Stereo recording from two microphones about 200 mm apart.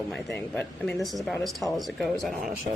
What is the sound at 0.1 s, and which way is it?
Speech, centre (ahead or behind).